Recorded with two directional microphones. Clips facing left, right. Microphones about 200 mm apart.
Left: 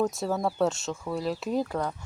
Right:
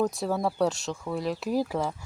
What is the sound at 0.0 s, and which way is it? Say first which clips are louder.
Speech: even; centre (ahead or behind).